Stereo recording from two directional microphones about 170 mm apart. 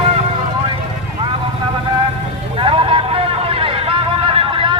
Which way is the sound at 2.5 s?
30° right (ahead or behind).